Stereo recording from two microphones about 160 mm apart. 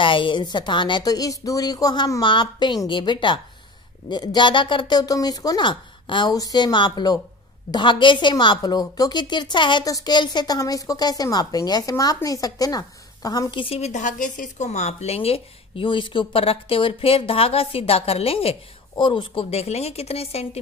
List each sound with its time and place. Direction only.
0.0 s a woman's voice: 30° left (ahead or behind)